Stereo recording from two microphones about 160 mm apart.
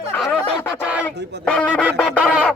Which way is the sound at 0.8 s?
5° right (ahead or behind).